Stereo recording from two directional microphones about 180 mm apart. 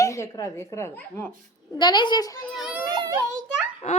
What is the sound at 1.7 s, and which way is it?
Speech, 25° left (ahead or behind).